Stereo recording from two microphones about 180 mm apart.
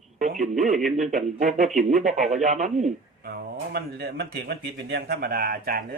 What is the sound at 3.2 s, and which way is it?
Speech, 60° right (ahead or behind).